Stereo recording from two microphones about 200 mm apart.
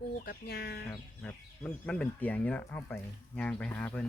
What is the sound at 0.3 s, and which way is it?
Speech, 50° left (ahead or behind).